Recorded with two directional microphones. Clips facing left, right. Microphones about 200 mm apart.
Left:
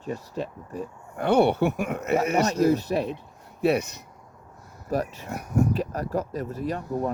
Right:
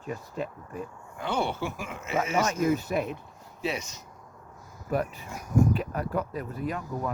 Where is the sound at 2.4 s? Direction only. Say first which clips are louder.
Left 4 dB; 35° left (ahead or behind).